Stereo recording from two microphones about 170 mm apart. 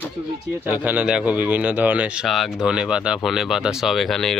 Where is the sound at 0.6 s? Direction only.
10° right (ahead or behind).